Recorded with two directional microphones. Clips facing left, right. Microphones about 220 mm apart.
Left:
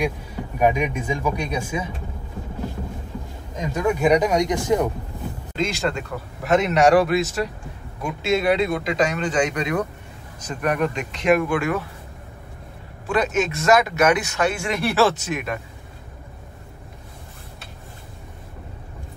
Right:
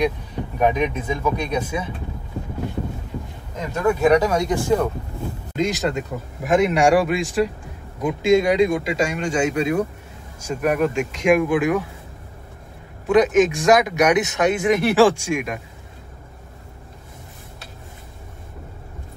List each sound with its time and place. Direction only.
0.6 s speech: 10° left (ahead or behind)
3.7 s speech: 15° left (ahead or behind)
5.6 s speech: 15° right (ahead or behind)
13.1 s speech: 15° right (ahead or behind)